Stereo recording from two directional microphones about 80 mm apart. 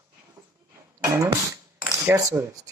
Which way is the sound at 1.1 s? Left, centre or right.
Right.